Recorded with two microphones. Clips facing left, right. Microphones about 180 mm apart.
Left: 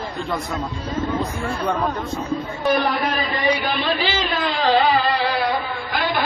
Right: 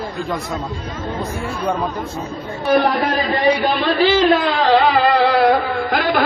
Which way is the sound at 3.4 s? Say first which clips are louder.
Right 6 dB; 35° right (ahead or behind).